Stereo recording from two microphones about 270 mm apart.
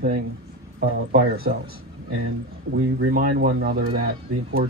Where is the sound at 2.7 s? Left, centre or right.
Right.